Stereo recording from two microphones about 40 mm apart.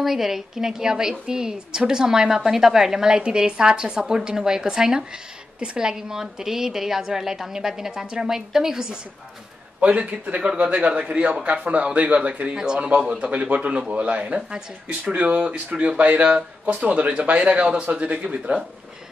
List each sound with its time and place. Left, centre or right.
0.0 s a woman's voice: centre
9.8 s a man's voice: right
13.3 s speech: right